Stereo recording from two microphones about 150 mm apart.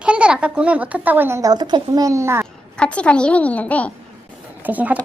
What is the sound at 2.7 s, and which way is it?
A woman's voice, 5° left (ahead or behind).